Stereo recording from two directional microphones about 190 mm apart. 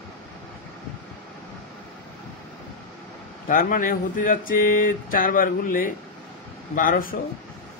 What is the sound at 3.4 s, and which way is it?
Speech, 45° left (ahead or behind).